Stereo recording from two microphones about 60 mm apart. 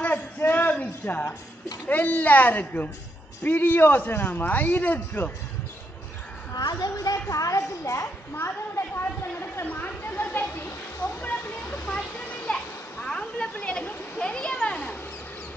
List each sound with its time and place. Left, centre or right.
0.0 s a sound: left
1.9 s a man's voice: left
6.5 s a woman's voice: left
7.2 s a woman's voice: left
8.7 s a man's voice: left
9.7 s a sound: left
11.2 s children playing: left